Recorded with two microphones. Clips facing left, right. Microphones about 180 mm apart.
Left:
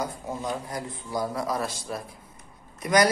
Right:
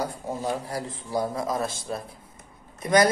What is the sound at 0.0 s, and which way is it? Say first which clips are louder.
Speech: right 2 dB; 30° right (ahead or behind).